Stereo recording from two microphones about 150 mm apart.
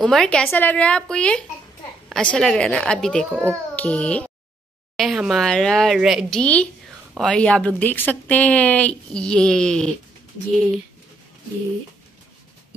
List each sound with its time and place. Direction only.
0.0 s a woman's voice: 5° left (ahead or behind)
6.4 s a woman's voice: 10° left (ahead or behind)